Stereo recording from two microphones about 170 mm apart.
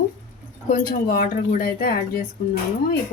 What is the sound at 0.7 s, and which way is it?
Speech, 50° left (ahead or behind).